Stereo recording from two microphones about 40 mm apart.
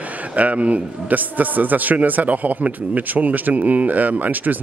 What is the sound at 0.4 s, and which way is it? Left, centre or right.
A man's voice, right.